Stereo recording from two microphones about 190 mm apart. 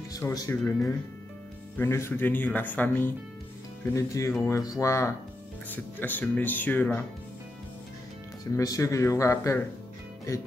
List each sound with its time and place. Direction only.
0.1 s speech: 20° left (ahead or behind)
8.5 s speech: 15° left (ahead or behind)